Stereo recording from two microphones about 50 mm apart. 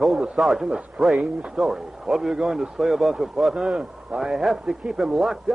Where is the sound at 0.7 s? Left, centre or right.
Centre.